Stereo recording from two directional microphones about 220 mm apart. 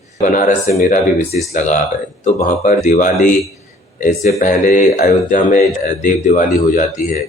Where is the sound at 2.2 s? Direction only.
35° left (ahead or behind).